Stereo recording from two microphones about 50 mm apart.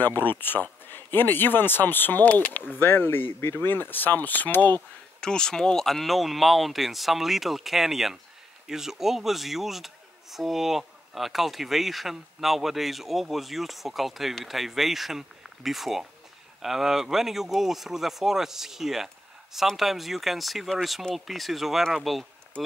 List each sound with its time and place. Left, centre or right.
0.0 s speech: left
2.8 s speech: left
5.2 s speech: centre